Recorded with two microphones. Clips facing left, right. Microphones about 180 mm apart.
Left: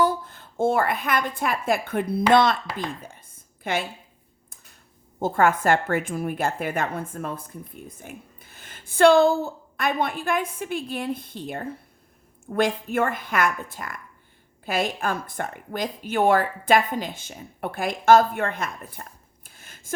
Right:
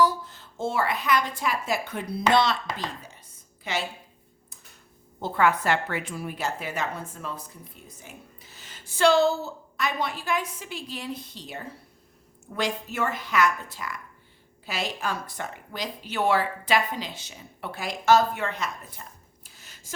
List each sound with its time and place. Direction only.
0.0 s a woman's voice: 55° left (ahead or behind)
5.2 s a woman's voice: 45° left (ahead or behind)
19.5 s a sound: 50° left (ahead or behind)